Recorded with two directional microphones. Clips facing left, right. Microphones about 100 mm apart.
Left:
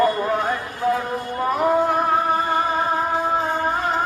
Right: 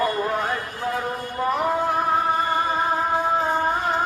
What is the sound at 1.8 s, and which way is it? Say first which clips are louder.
Music: left 2 dB; centre (ahead or behind).